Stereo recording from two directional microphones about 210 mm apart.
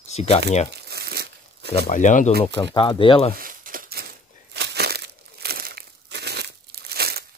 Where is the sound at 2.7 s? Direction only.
25° left (ahead or behind).